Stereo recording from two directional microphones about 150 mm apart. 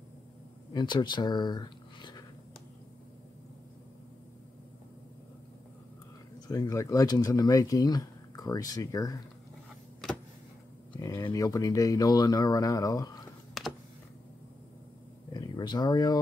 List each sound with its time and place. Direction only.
0.7 s speech: 30° left (ahead or behind)
6.4 s speech: 25° left (ahead or behind)
11.0 s speech: 20° left (ahead or behind)
13.6 s computer keyboard: centre (ahead or behind)
15.3 s speech: 30° left (ahead or behind)